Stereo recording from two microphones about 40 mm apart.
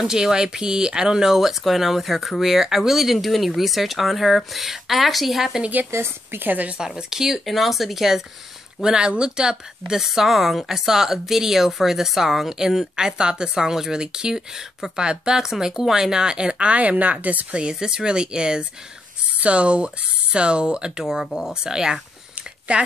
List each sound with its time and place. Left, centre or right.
0.0 s speech: centre
6.4 s a woman's voice: right
7.0 s speech: centre
7.4 s speech: centre
8.8 s speech: centre
10.0 s speech: centre; by 17.5 s right
17.5 s speech: right
21.0 s speech: centre
22.7 s speech: right